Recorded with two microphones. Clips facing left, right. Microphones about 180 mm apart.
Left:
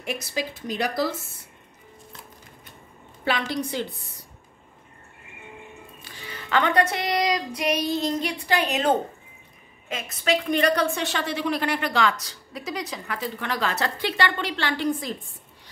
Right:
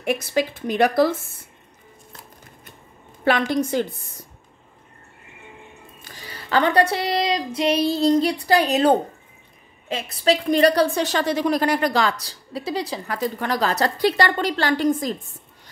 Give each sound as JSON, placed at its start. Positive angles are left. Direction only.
{"t": 0.0, "sound": "speech", "side_deg": -60}
{"t": 3.3, "sound": "a woman's voice", "side_deg": -50}
{"t": 6.0, "sound": "a woman's voice", "side_deg": -40}